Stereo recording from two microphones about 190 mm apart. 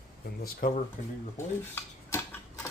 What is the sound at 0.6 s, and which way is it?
Speech, 50° left (ahead or behind).